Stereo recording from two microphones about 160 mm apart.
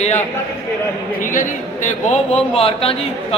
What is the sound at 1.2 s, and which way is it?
Speech, 55° left (ahead or behind).